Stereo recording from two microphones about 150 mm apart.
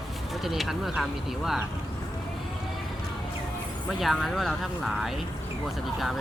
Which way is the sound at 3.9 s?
Centre (ahead or behind).